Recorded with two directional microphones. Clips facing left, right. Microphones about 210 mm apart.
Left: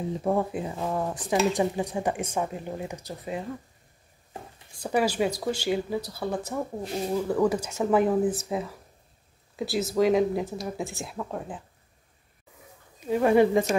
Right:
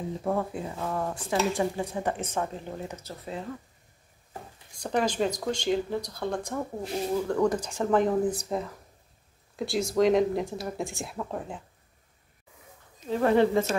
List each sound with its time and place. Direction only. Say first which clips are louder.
0.2 s speech: left 3 dB; 15° left (ahead or behind)
4.7 s speech: left 2 dB; 10° left (ahead or behind)
13.0 s speech: left 2 dB; 10° left (ahead or behind)